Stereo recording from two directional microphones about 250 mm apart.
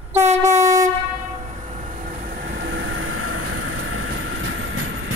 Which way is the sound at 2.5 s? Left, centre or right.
Right.